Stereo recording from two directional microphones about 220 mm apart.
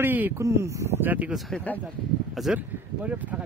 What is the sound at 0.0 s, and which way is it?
Speech, 10° right (ahead or behind).